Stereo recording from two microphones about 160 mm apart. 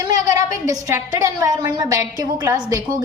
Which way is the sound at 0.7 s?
20° right (ahead or behind).